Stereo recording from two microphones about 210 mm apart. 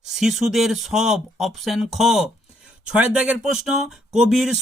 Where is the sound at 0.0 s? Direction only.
Centre (ahead or behind).